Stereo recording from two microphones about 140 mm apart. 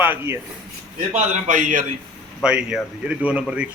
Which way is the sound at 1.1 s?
60° right (ahead or behind).